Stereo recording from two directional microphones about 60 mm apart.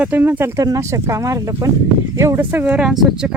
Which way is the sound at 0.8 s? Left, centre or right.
Right.